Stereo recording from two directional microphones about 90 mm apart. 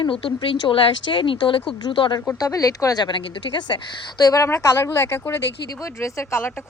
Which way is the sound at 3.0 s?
65° left (ahead or behind).